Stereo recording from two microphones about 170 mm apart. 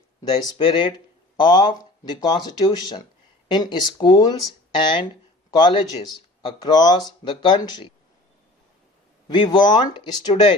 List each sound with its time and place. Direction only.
0.2 s speech: 30° left (ahead or behind)
9.3 s speech: 25° left (ahead or behind)